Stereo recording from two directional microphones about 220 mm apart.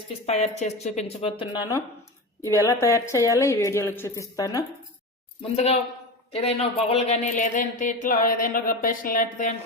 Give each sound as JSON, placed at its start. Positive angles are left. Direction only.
{"t": 0.3, "sound": "a woman's voice", "side_deg": 30}
{"t": 5.4, "sound": "speech", "side_deg": 30}